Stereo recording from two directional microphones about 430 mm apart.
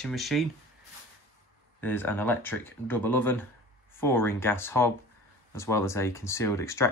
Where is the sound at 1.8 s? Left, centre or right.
Centre.